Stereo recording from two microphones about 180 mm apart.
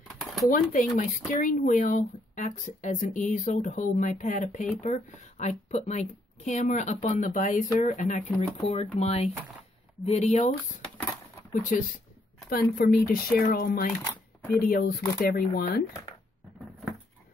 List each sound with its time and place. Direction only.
0.1 s a sound: centre (ahead or behind)
0.5 s a woman's voice: 45° left (ahead or behind)
12.4 s speech: 60° left (ahead or behind)